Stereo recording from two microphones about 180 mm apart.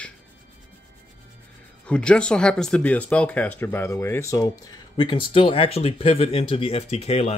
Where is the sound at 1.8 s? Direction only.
5° left (ahead or behind).